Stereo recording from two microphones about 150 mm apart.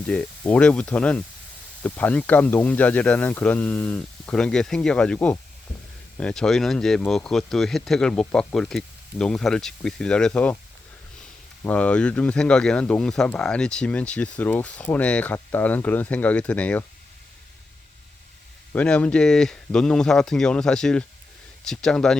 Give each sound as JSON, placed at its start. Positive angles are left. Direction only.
{"t": 0.1, "sound": "speech", "side_deg": 10}
{"t": 11.6, "sound": "speech", "side_deg": 10}
{"t": 18.7, "sound": "speech", "side_deg": 10}